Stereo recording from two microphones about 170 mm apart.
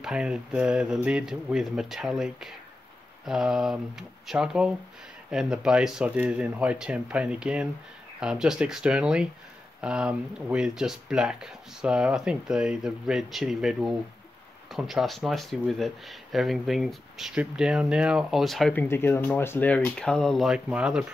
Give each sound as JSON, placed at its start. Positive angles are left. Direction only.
{"t": 0.0, "sound": "speech", "side_deg": -5}